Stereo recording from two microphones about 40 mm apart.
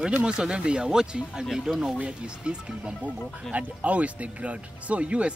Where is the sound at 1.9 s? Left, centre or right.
Right.